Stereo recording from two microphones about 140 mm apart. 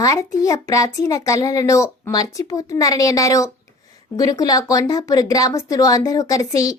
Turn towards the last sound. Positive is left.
turn(degrees=25)  # may be behind; listen again after turning